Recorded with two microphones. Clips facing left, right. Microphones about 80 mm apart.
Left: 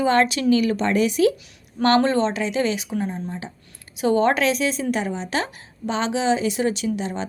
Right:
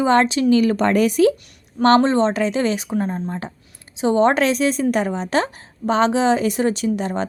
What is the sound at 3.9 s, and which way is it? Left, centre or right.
A woman's voice, right.